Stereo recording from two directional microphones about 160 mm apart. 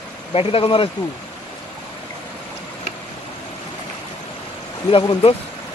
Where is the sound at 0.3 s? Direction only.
35° left (ahead or behind).